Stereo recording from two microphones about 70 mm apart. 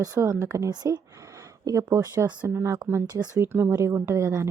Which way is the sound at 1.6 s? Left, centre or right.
Right.